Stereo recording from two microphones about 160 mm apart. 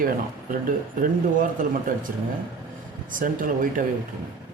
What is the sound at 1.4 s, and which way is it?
Speech, 55° right (ahead or behind).